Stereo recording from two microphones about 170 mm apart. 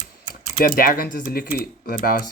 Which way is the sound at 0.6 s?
55° left (ahead or behind).